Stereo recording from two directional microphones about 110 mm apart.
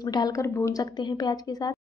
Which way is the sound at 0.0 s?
40° left (ahead or behind).